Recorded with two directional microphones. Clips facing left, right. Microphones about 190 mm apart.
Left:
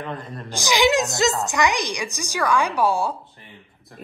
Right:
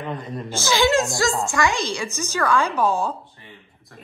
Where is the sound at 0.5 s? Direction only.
15° left (ahead or behind).